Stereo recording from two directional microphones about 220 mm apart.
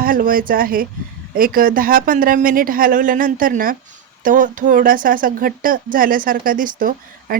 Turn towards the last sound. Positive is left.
turn(degrees=-40)  # may be behind; listen again after turning